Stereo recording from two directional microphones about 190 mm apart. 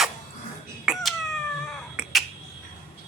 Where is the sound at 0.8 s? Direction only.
Centre (ahead or behind).